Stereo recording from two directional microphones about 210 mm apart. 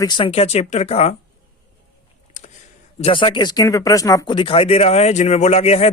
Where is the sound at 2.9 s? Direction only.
25° left (ahead or behind).